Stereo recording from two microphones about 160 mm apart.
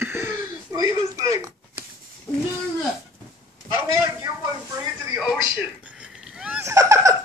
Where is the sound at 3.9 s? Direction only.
20° right (ahead or behind).